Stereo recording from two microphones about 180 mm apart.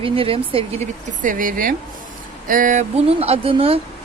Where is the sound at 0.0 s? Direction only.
30° right (ahead or behind).